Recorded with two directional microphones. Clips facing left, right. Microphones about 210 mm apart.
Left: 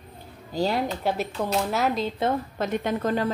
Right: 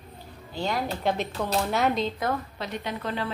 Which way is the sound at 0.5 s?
35° left (ahead or behind).